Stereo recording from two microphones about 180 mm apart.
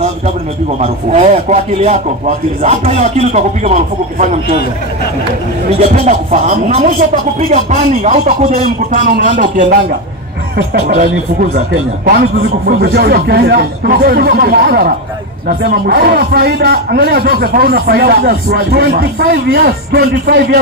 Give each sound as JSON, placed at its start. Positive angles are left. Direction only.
{"t": 0.7, "sound": "speech", "side_deg": -40}
{"t": 5.9, "sound": "speech", "side_deg": -45}
{"t": 12.6, "sound": "a man's voice", "side_deg": -60}